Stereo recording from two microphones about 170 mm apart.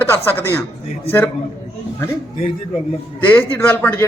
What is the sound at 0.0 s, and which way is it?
Speech, 10° left (ahead or behind).